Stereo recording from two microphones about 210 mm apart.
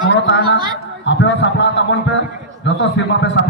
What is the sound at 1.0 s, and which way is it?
A man's voice, 55° left (ahead or behind).